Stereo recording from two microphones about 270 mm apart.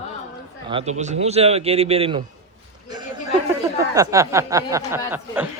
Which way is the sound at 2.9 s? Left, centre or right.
Centre.